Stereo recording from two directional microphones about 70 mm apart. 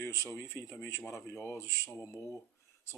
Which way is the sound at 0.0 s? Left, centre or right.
Left.